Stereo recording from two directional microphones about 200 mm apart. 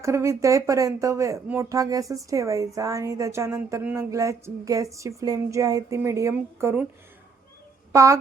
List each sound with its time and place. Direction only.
0.0 s speech: 15° right (ahead or behind)
7.9 s speech: 15° right (ahead or behind)